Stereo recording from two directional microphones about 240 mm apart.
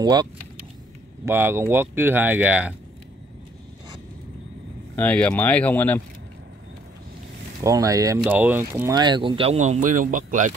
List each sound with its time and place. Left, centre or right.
0.0 s speech: centre
4.9 s speech: centre
7.6 s speech: centre; by 10.5 s right